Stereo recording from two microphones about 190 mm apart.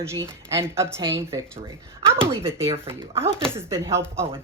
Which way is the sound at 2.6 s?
30° right (ahead or behind).